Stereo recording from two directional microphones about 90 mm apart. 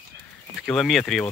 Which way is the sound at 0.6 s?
5° left (ahead or behind).